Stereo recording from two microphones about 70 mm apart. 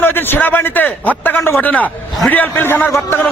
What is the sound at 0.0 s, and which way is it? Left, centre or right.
A man's voice, left.